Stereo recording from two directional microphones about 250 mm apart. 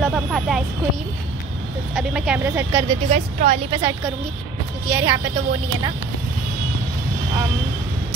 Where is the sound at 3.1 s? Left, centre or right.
Right.